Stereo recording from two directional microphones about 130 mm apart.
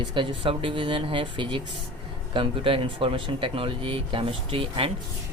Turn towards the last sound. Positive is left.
turn(degrees=-45)  # may be behind; listen again after turning